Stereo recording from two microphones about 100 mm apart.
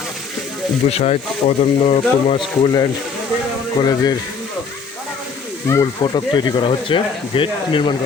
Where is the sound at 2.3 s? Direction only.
50° left (ahead or behind).